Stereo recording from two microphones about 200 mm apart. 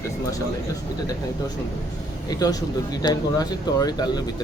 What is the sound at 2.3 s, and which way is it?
Speech, 20° left (ahead or behind).